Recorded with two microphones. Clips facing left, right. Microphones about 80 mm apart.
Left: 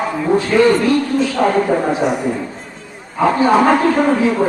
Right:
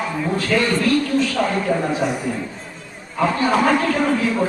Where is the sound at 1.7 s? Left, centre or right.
Left.